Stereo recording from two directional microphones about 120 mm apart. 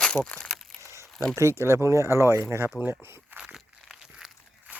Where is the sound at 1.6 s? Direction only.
25° right (ahead or behind).